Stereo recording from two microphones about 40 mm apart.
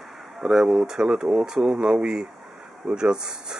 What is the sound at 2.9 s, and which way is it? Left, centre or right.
Speech, centre.